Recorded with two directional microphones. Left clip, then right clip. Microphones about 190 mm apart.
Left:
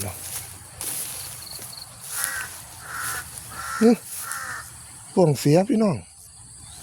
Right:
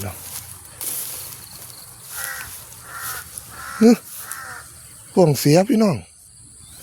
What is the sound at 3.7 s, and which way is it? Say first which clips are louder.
Speech: right 4 dB; 35° right (ahead or behind).